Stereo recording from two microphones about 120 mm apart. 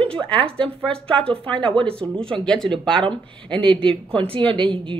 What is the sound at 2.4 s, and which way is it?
Speech, 5° left (ahead or behind).